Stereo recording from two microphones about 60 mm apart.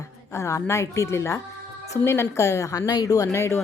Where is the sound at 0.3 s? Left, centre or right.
Left.